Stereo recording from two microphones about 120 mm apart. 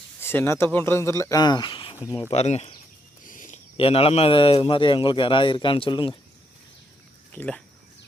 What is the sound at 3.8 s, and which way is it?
A man's voice, 50° left (ahead or behind).